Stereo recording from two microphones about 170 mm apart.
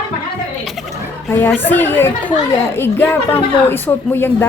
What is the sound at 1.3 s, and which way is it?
Speech, 10° left (ahead or behind).